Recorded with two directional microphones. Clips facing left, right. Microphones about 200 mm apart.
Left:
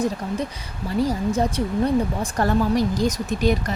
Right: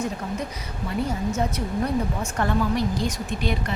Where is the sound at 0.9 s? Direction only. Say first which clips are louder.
Left 4 dB; 35° left (ahead or behind).